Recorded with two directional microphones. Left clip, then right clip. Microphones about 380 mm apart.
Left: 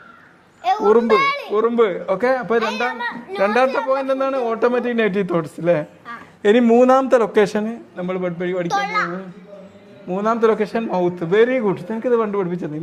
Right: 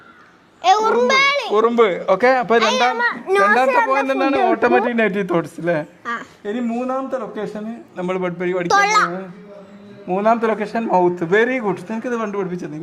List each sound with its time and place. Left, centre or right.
0.6 s a child's voice: right
1.5 s a man's voice: centre
2.6 s a child's voice: right
3.4 s a man's voice: centre
6.4 s speech: left
7.9 s a man's voice: centre
8.6 s a child's voice: right
10.1 s speech: centre